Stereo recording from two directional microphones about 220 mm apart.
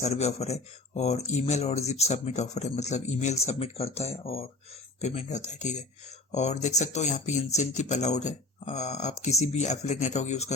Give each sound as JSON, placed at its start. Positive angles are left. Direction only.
{"t": 0.0, "sound": "speech", "side_deg": 30}